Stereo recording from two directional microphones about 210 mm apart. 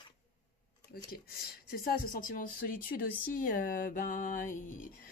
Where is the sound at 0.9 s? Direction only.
45° left (ahead or behind).